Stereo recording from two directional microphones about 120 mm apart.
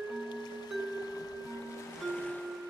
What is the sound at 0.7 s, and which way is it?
Mallet percussion, 35° left (ahead or behind).